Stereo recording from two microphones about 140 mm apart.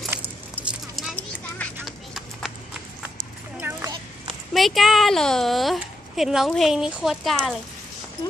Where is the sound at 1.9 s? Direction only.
Centre (ahead or behind).